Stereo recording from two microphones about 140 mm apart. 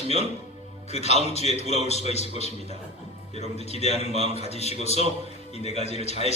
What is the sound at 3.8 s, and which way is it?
A man's voice, 50° left (ahead or behind).